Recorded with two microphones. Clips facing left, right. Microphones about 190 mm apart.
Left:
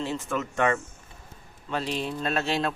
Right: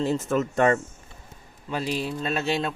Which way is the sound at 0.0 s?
40° right (ahead or behind).